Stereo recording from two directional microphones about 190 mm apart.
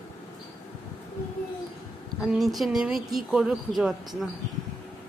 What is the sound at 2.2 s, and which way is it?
A child's voice, centre (ahead or behind).